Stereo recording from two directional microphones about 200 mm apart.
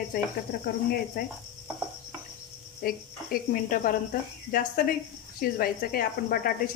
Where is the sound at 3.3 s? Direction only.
45° left (ahead or behind).